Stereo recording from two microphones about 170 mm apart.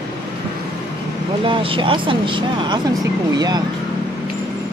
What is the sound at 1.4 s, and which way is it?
Speech, 30° right (ahead or behind).